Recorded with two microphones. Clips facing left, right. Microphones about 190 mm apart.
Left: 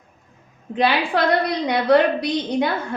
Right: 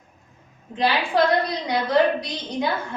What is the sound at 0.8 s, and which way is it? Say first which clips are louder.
A woman's voice: left 1 dB; 65° left (ahead or behind).